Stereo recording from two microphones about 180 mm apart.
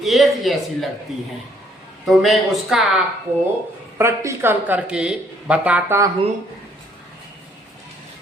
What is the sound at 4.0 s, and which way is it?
Speech, 15° right (ahead or behind).